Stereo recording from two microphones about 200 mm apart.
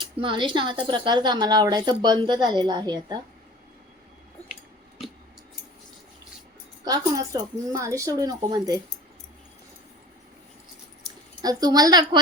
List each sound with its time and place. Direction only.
0.0 s speech: 25° right (ahead or behind)
6.8 s speech: 20° right (ahead or behind)
11.4 s speech: 20° right (ahead or behind)